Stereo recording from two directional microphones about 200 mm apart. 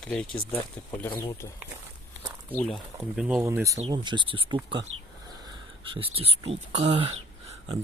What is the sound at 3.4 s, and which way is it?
Speech, 15° right (ahead or behind).